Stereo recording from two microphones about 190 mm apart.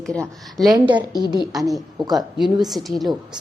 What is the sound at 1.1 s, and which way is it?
Speech, 20° left (ahead or behind).